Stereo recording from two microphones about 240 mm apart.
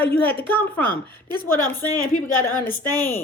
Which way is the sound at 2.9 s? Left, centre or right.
Centre.